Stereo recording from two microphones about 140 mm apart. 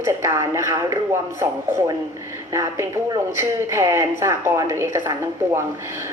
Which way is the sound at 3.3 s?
20° right (ahead or behind).